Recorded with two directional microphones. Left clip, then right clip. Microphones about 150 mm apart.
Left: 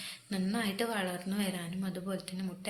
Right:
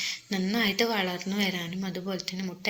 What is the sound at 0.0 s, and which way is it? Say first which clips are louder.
A woman's voice: right 8 dB; 15° right (ahead or behind).